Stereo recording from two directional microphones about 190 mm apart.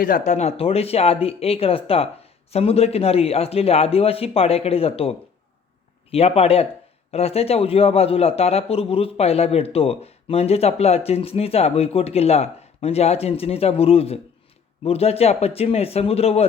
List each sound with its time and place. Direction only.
0.0 s a man's voice: 40° left (ahead or behind)